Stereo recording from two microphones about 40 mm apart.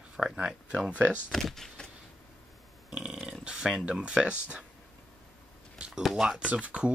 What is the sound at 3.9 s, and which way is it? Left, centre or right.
Speech, right.